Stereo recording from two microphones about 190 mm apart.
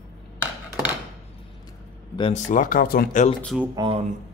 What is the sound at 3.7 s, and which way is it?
Speech, 25° right (ahead or behind).